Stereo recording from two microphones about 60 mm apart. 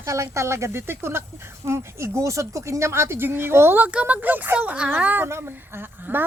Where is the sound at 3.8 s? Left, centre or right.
Right.